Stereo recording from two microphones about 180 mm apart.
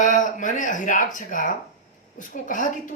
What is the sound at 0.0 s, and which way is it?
Speech, 45° left (ahead or behind).